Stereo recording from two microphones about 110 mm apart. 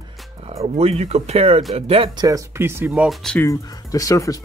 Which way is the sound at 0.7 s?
75° right (ahead or behind).